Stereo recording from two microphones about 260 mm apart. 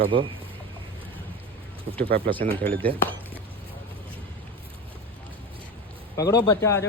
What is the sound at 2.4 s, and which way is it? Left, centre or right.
Speech, right.